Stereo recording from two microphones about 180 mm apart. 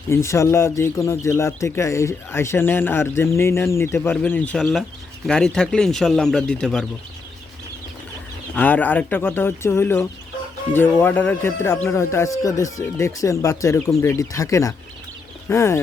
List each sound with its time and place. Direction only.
0.1 s speech: 15° left (ahead or behind)
8.5 s speech: 10° left (ahead or behind)